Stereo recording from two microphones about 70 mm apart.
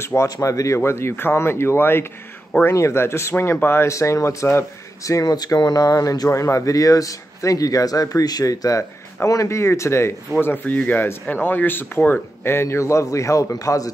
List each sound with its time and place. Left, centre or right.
0.0 s speech: left
0.7 s speech: left
3.9 s speech: left
5.2 s speech: left
10.4 s speech: left